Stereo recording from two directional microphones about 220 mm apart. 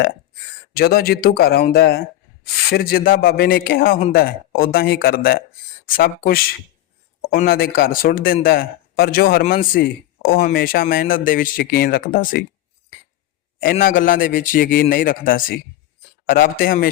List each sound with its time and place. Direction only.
0.7 s a man's voice: 45° left (ahead or behind)
13.6 s a man's voice: 40° left (ahead or behind)